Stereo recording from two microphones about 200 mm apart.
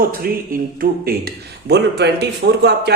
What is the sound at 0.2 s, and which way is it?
Speech, 50° right (ahead or behind).